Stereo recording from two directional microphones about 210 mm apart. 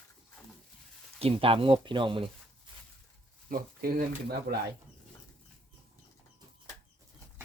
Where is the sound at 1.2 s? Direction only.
25° right (ahead or behind).